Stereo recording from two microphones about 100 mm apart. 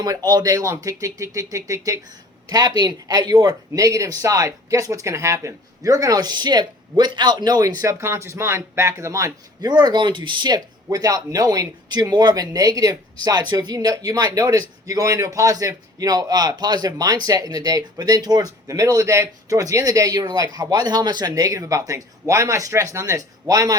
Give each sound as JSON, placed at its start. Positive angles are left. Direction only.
{"t": 0.3, "sound": "speech", "side_deg": -40}
{"t": 10.8, "sound": "speech", "side_deg": -35}